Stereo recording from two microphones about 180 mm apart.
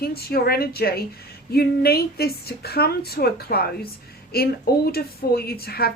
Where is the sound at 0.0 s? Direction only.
60° left (ahead or behind).